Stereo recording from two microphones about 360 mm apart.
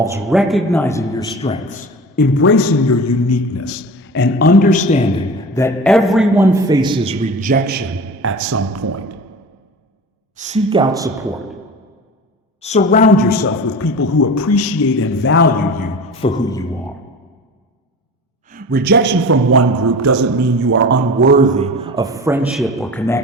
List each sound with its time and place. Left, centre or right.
0.0 s a man's voice: centre
5.5 s a man's voice: centre; by 9.1 s right
10.3 s a man's voice: centre
12.6 s a man's voice: centre
13.7 s a man's voice: left; by 16.6 s centre
18.5 s a man's voice: right
20.6 s a man's voice: right; by 23.2 s centre